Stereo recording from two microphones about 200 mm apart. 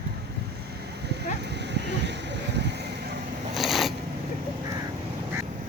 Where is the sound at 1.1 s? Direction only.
55° right (ahead or behind).